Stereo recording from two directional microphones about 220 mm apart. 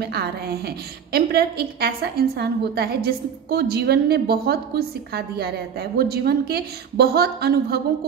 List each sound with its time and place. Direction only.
0.0 s a woman's voice: 45° right (ahead or behind)